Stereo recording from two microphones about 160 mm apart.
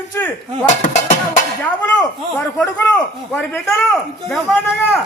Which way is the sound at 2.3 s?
10° left (ahead or behind).